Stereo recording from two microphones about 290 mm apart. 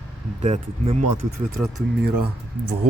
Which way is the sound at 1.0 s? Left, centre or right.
Right.